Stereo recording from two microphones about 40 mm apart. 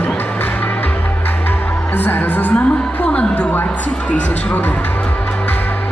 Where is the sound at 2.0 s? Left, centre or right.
Left.